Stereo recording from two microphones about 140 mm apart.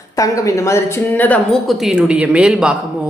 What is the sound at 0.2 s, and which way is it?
A woman's voice, 25° left (ahead or behind).